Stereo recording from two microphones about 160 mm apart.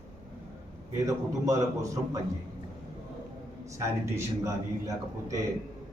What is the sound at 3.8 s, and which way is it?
A man's voice, 20° right (ahead or behind).